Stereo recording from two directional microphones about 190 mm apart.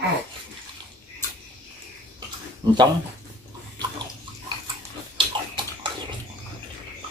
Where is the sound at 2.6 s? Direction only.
20° right (ahead or behind).